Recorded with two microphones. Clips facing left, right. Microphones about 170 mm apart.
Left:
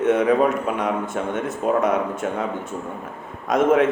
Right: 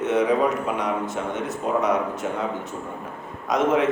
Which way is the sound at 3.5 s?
55° left (ahead or behind).